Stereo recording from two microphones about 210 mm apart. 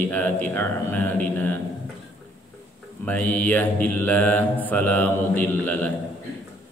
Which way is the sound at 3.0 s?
5° left (ahead or behind).